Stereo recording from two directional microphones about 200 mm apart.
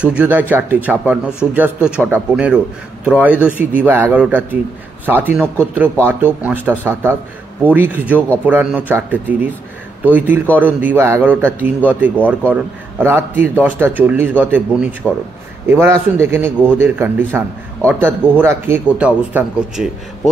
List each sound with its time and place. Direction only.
0.0 s a man's voice: 5° right (ahead or behind)